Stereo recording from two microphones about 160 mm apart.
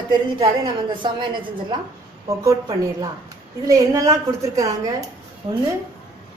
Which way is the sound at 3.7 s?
20° right (ahead or behind).